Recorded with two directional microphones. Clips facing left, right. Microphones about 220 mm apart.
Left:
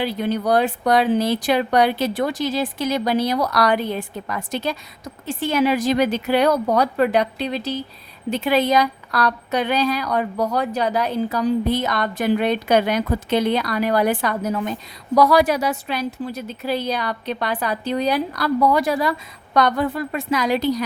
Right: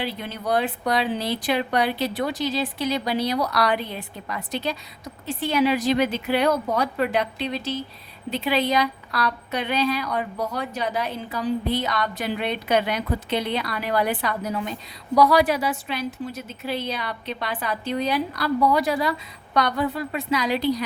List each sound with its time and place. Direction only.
0.2 s a woman's voice: 40° left (ahead or behind)